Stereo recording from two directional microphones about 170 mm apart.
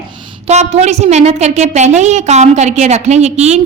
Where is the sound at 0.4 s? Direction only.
40° right (ahead or behind).